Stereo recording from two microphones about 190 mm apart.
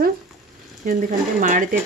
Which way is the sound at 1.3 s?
45° right (ahead or behind).